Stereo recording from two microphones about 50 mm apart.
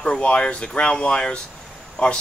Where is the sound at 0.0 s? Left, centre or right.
Left.